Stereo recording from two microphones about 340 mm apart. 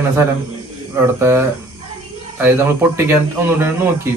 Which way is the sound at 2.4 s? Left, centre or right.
Centre.